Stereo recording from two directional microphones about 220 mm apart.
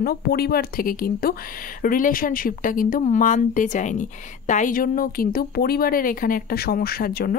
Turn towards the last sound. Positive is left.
turn(degrees=45)  # may be behind; listen again after turning